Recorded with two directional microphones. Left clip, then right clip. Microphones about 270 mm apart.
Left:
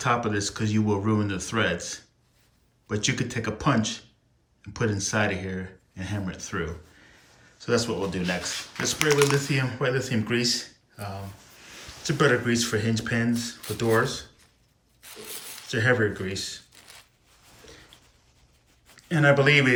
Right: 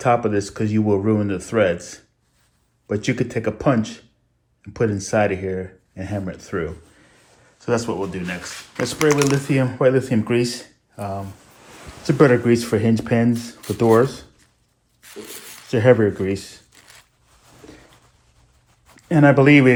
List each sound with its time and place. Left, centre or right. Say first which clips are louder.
0.0 s speech: right 7 dB; centre
8.9 s speech: right 4 dB; centre
15.0 s a sound: right 4 dB; centre
15.7 s speech: right 8 dB; centre
16.7 s a sound: right 2 dB; centre
18.9 s speech: right 6 dB; centre